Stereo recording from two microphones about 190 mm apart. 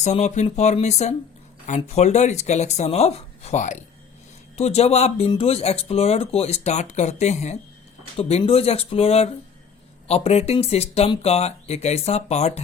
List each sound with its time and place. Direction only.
0.0 s speech: 35° left (ahead or behind)